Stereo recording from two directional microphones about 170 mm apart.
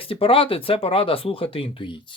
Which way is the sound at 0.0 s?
35° left (ahead or behind).